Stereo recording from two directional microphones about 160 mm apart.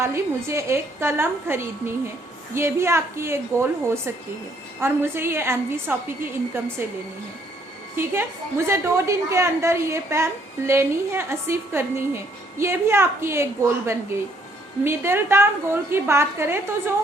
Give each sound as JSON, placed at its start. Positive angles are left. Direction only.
{"t": 0.0, "sound": "a woman's voice", "side_deg": -15}
{"t": 7.9, "sound": "a woman's voice", "side_deg": -15}